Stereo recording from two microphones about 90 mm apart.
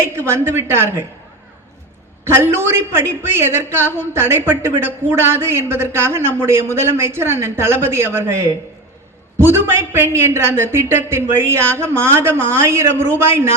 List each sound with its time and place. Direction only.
0.0 s a man's voice: 25° right (ahead or behind)
2.3 s a man's voice: 25° right (ahead or behind)